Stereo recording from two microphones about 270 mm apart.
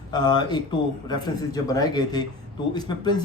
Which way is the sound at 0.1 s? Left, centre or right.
Centre.